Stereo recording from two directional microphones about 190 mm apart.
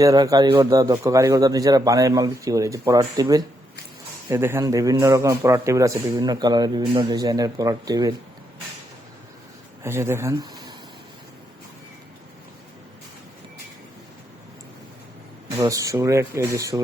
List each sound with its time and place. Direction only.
0.0 s a man's voice: 20° right (ahead or behind)
9.8 s speech: 15° right (ahead or behind)
15.5 s a man's voice: 15° right (ahead or behind)